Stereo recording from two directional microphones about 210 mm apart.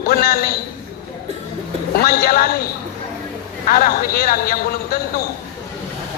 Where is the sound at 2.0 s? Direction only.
45° left (ahead or behind).